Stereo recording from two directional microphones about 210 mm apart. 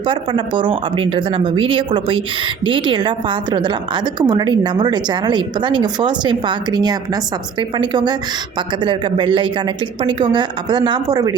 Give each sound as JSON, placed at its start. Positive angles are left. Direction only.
{"t": 0.0, "sound": "a woman's voice", "side_deg": -25}